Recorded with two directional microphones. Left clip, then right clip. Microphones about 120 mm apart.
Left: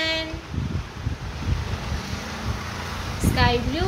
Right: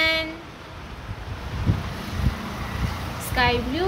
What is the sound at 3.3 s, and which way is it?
Speech, 40° right (ahead or behind).